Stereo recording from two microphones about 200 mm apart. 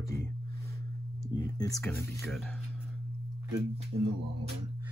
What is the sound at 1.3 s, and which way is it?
Speech, 15° left (ahead or behind).